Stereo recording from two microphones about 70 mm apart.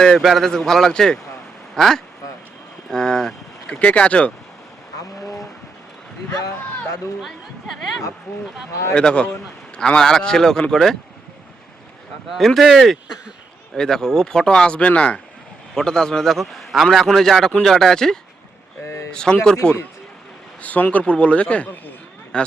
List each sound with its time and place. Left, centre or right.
0.2 s a man's voice: centre
3.8 s speech: centre
8.3 s speech: left
9.0 s speech: centre
12.3 s a man's voice: centre
18.9 s speech: left
19.1 s speech: centre